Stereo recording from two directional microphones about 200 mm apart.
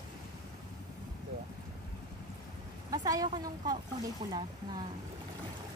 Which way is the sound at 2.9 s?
20° right (ahead or behind).